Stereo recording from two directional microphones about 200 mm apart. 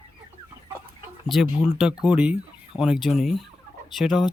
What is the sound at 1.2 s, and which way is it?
Speech, centre (ahead or behind).